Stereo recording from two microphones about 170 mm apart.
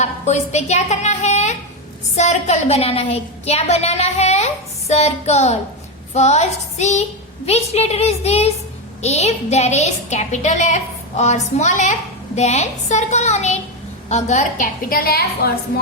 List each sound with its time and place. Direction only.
0.0 s a woman's voice: 40° left (ahead or behind); by 15.5 s 65° left (ahead or behind)